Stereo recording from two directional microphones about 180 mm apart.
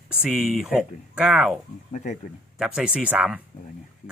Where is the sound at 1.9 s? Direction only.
40° left (ahead or behind).